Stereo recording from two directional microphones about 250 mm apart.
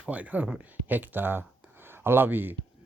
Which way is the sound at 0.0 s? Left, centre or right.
Centre.